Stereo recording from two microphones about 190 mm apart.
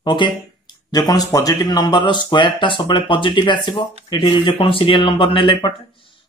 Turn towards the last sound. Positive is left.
turn(degrees=25)  # may be behind; listen again after turning